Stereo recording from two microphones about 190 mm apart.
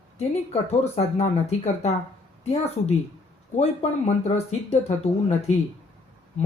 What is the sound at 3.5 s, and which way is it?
Speech, 35° left (ahead or behind).